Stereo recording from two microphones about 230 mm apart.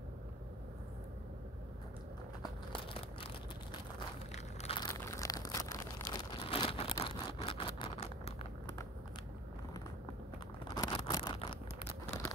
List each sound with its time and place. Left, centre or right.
2.7 s crumpling: left
4.3 s crushing: left
4.9 s crumpling: centre
10.7 s a sound: centre